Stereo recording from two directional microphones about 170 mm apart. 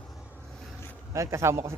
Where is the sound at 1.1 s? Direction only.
15° right (ahead or behind).